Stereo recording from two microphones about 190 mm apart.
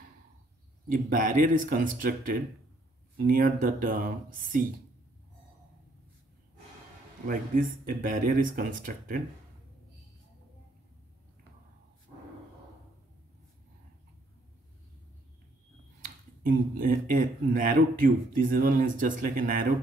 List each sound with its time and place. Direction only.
0.8 s speech: 45° right (ahead or behind)
7.2 s speech: 50° right (ahead or behind)
16.4 s speech: 50° right (ahead or behind)